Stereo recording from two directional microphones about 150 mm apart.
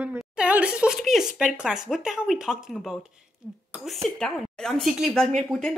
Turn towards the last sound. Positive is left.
turn(degrees=5)  # may be behind; listen again after turning